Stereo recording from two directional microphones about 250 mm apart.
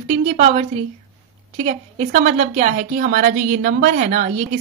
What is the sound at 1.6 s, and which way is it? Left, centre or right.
A woman's voice, right.